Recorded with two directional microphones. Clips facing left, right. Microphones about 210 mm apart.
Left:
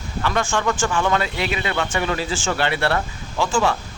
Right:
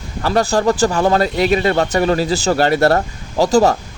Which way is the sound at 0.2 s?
35° right (ahead or behind).